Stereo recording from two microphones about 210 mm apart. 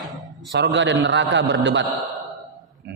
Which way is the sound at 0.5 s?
60° right (ahead or behind).